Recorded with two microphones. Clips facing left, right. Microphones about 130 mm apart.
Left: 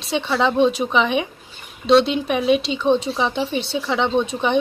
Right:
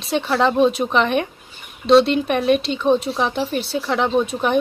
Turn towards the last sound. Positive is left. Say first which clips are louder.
# right 1 dB
turn(degrees=-5)  # may be behind; listen again after turning